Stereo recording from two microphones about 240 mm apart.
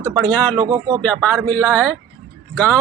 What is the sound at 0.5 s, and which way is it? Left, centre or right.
Speech, centre.